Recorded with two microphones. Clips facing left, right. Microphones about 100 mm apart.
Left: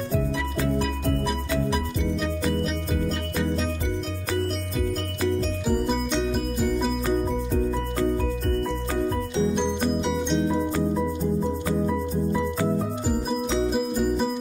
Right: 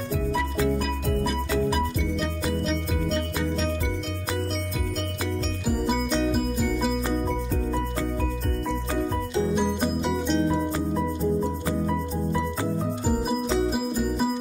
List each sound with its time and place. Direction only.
5.7 s music: 5° right (ahead or behind)
9.6 s music: 5° right (ahead or behind)
13.5 s music: centre (ahead or behind)